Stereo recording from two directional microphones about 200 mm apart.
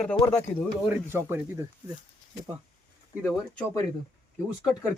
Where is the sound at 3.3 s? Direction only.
15° left (ahead or behind).